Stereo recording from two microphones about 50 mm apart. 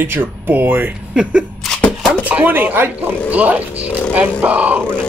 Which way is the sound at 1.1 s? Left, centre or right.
Centre.